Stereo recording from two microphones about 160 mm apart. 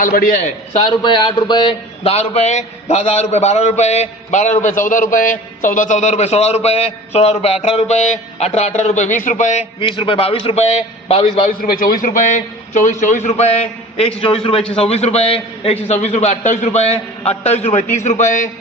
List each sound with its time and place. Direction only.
0.0 s a man's voice: 60° left (ahead or behind)
0.9 s a man's voice: 30° left (ahead or behind)
11.4 s a man's voice: 60° left (ahead or behind)